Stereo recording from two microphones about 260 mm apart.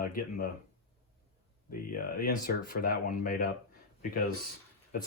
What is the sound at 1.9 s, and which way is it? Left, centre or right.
Speech, left.